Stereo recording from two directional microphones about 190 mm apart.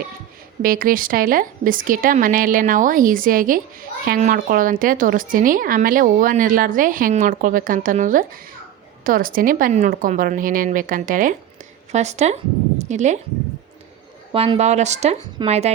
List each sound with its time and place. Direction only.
0.6 s speech: 50° right (ahead or behind)
14.3 s speech: 30° right (ahead or behind)